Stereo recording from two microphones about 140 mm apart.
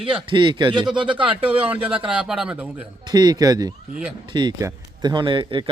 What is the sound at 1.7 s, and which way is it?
A man's voice, 10° right (ahead or behind).